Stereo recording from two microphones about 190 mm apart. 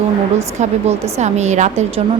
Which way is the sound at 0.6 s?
35° right (ahead or behind).